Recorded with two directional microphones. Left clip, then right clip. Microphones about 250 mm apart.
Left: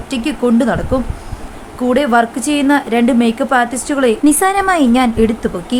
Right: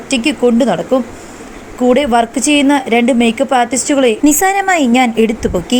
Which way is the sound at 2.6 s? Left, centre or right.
Centre.